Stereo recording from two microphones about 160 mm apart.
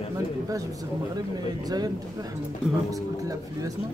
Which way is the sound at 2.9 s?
20° right (ahead or behind).